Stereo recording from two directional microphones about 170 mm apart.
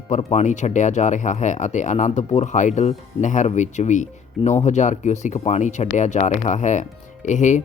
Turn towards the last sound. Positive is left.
turn(degrees=45)  # may be behind; listen again after turning